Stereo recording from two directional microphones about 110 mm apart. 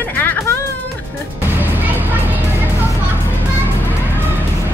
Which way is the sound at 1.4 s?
20° right (ahead or behind).